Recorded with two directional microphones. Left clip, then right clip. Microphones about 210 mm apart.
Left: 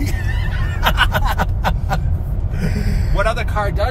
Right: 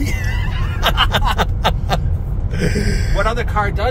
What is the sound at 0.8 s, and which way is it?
Snicker, 40° right (ahead or behind).